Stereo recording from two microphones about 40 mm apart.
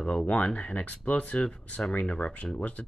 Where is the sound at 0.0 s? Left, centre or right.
Left.